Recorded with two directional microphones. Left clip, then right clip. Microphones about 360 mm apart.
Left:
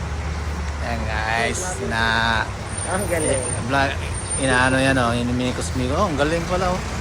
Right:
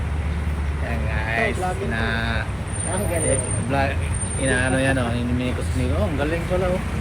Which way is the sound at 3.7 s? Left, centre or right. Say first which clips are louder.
Left 3 dB; centre.